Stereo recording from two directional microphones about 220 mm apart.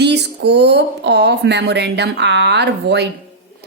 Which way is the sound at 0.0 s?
50° right (ahead or behind).